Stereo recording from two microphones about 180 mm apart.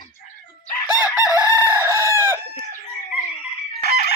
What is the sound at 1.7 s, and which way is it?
Chicken, 15° right (ahead or behind).